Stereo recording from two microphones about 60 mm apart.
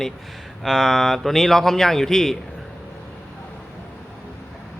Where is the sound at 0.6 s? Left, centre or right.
Centre.